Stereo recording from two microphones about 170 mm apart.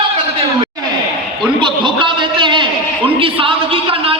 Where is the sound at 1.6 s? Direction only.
30° right (ahead or behind).